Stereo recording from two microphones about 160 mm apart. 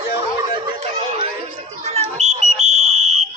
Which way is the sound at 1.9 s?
45° right (ahead or behind).